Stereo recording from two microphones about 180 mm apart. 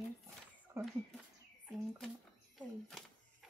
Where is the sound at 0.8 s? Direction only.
15° right (ahead or behind).